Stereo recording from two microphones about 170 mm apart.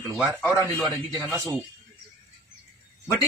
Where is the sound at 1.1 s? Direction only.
15° right (ahead or behind).